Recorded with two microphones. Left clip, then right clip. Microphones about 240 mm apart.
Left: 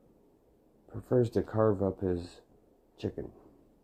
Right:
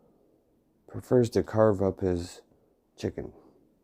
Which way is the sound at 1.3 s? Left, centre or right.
Right.